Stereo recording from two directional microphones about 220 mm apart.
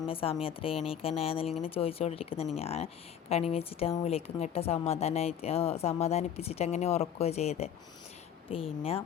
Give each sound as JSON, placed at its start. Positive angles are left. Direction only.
{"t": 0.1, "sound": "speech", "side_deg": 25}